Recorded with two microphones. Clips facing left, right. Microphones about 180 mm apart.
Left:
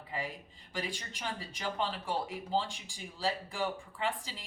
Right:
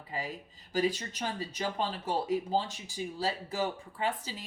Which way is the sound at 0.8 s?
40° right (ahead or behind).